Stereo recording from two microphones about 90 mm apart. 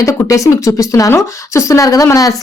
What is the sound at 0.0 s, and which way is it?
Speech, 35° left (ahead or behind).